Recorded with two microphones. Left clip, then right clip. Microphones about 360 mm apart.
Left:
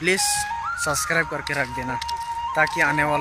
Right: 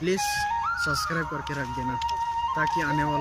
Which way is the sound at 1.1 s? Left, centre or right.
Left.